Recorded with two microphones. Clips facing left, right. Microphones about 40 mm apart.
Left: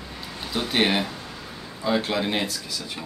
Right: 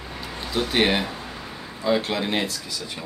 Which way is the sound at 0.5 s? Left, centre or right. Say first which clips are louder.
Right 1 dB; centre.